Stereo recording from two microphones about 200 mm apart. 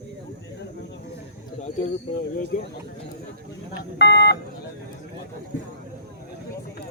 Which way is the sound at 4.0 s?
60° left (ahead or behind).